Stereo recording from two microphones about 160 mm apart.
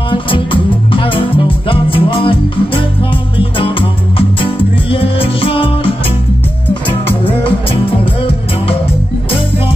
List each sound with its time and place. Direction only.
0.1 s music: 30° left (ahead or behind)